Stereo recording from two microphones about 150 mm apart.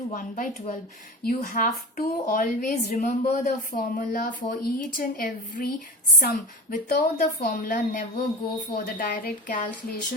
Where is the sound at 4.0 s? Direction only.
70° left (ahead or behind).